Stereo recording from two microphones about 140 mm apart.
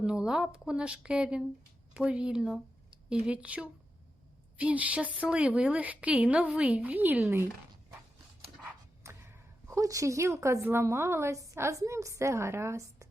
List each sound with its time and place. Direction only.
0.0 s a woman's voice: 5° right (ahead or behind)
8.6 s speech: 20° right (ahead or behind)